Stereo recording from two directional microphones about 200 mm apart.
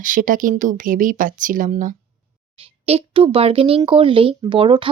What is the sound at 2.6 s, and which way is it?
Speech, 30° right (ahead or behind).